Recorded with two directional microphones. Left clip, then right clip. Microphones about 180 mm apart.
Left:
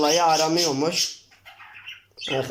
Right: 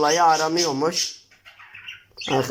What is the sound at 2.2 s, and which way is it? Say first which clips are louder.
Speech: right 3 dB; 10° right (ahead or behind).